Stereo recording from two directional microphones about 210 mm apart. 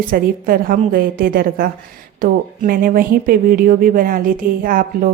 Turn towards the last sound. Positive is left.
turn(degrees=-40)  # may be behind; listen again after turning